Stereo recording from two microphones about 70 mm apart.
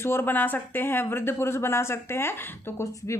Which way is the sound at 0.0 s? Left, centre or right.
Left.